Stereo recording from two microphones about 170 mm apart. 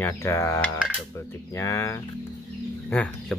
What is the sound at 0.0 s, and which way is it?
Speech, 15° left (ahead or behind).